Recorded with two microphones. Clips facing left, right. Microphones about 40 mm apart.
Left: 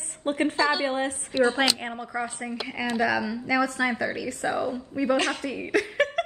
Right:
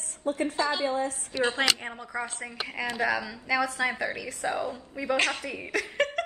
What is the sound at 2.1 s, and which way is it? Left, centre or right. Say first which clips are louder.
Speech: left 2 dB; centre.